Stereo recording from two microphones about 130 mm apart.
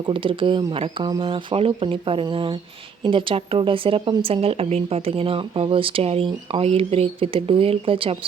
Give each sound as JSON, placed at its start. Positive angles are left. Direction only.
{"t": 0.1, "sound": "a woman's voice", "side_deg": -40}